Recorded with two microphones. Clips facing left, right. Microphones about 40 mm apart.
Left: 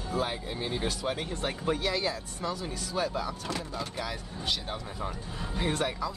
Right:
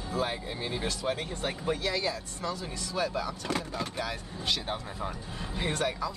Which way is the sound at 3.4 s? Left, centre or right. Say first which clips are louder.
Right 2 dB; right.